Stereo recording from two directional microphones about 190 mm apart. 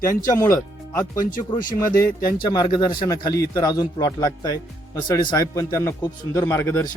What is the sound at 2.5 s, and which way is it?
Speech, 25° left (ahead or behind).